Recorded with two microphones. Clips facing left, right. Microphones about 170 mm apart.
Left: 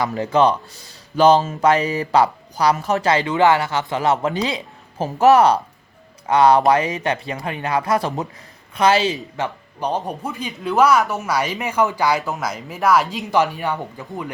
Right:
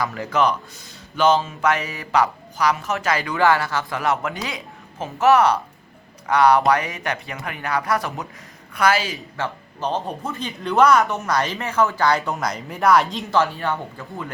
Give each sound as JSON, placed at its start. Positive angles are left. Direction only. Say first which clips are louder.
{"t": 0.0, "sound": "speech", "louder": "left 4 dB", "side_deg": 20}
{"t": 13.2, "sound": "speech", "louder": "left 2 dB", "side_deg": 15}